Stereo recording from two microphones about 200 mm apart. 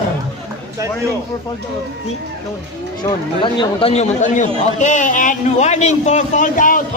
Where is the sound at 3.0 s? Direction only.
20° left (ahead or behind); by 6.8 s 40° left (ahead or behind).